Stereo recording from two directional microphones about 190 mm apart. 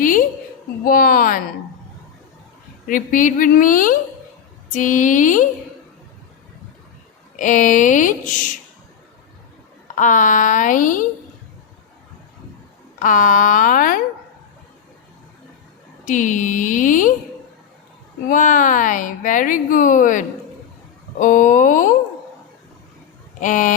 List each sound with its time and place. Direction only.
0.0 s a sound: 45° left (ahead or behind)
0.9 s speech: 50° left (ahead or behind)
2.8 s speech: 45° left (ahead or behind)
7.3 s speech: 40° left (ahead or behind)
9.9 s speech: 40° left (ahead or behind)
13.0 s speech: 45° left (ahead or behind)
16.0 s speech: 40° left (ahead or behind)
18.3 s speech: 45° left (ahead or behind)
23.4 s speech: 40° left (ahead or behind)